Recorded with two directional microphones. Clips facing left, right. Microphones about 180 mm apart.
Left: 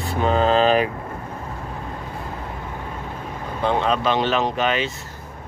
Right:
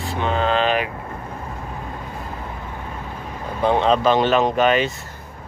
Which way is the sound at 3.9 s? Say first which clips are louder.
Right 4 dB; 45° right (ahead or behind).